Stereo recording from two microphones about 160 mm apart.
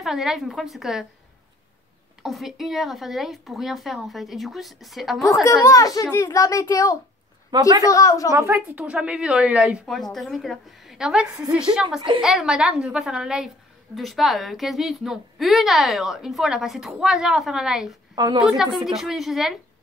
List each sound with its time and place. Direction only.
0.0 s a woman's voice: centre (ahead or behind)
2.2 s a woman's voice: centre (ahead or behind)
5.3 s a child's voice: 20° left (ahead or behind)
7.5 s a woman's voice: 25° right (ahead or behind)
7.8 s a child's voice: 20° left (ahead or behind)
8.3 s a woman's voice: 15° right (ahead or behind)
18.1 s a woman's voice: 25° right (ahead or behind)
18.9 s a woman's voice: centre (ahead or behind)